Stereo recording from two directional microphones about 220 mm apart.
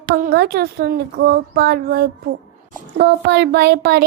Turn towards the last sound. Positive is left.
turn(degrees=-50)  # may be behind; listen again after turning